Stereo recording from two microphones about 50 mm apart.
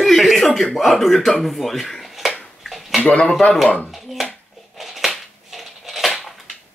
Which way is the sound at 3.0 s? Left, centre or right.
Left.